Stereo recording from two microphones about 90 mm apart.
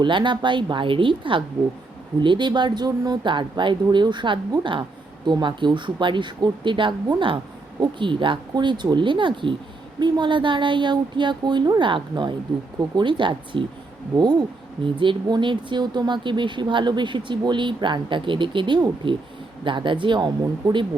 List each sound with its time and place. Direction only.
0.0 s speech: 65° right (ahead or behind)
14.2 s speech: 50° right (ahead or behind)
14.9 s speech: 60° right (ahead or behind)